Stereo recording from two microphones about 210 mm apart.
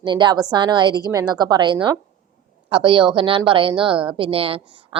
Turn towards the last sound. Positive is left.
turn(degrees=-25)  # may be behind; listen again after turning